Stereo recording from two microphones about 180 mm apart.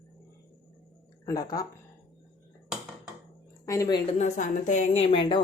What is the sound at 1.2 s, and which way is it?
Speech, 20° left (ahead or behind).